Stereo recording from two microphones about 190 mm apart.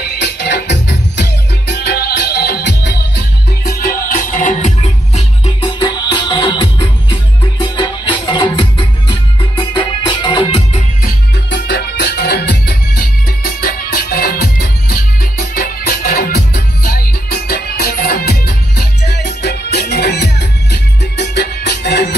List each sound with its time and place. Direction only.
0.2 s music: 60° left (ahead or behind)
3.6 s music: 50° left (ahead or behind)
5.6 s music: 25° left (ahead or behind)
11.5 s music: 60° left (ahead or behind)